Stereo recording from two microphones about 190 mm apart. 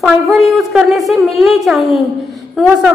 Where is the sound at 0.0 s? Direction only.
Centre (ahead or behind).